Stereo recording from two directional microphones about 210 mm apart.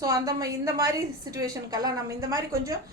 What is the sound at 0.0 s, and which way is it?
A woman's voice, 15° right (ahead or behind).